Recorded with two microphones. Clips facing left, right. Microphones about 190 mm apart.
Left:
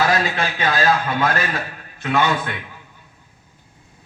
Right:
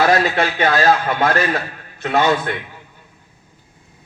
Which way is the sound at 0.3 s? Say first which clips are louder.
Right 4 dB; 50° right (ahead or behind).